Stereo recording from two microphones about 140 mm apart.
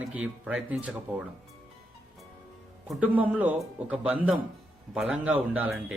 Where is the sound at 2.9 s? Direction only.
10° right (ahead or behind).